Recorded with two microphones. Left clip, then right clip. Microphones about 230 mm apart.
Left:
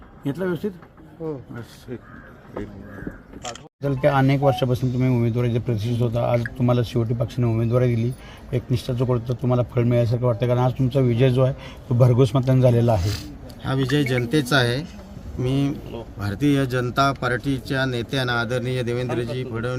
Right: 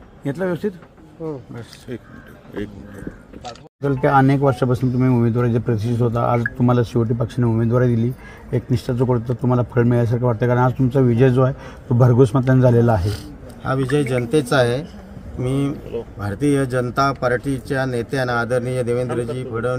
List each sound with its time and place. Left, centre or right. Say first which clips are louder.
0.3 s a man's voice: right 3 dB; right
1.9 s speech: right 3 dB; right
3.8 s a man's voice: right 4 dB; right
13.7 s a man's voice: right 3 dB; centre